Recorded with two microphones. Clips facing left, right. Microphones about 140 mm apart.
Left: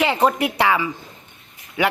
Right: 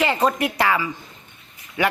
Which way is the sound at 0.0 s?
10° left (ahead or behind).